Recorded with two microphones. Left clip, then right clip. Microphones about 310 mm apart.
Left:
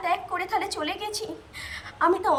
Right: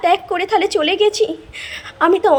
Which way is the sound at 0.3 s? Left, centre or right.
Centre.